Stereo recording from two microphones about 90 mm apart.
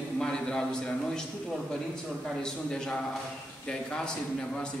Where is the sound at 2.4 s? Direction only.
10° left (ahead or behind).